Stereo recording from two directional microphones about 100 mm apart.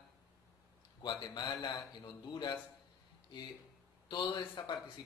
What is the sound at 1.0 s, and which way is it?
A man's voice, 45° left (ahead or behind).